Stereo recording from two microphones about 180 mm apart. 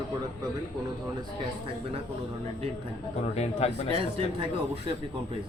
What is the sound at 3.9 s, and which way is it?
Speech, 30° right (ahead or behind).